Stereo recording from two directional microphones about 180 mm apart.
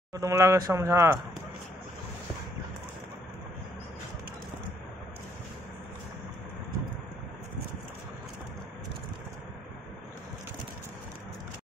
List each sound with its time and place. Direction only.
0.1 s speech: 15° right (ahead or behind)